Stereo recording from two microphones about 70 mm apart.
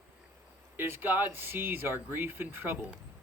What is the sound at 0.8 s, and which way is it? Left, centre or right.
Speech, right.